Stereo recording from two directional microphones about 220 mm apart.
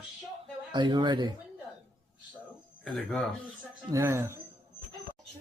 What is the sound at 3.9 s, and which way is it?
Speech, 10° right (ahead or behind).